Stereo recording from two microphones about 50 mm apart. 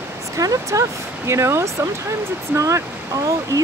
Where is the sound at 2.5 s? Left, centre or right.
Right.